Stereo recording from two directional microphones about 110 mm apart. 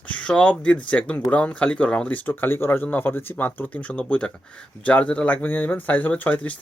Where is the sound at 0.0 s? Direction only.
10° left (ahead or behind).